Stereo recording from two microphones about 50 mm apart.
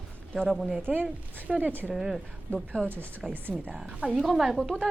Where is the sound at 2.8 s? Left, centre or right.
Right.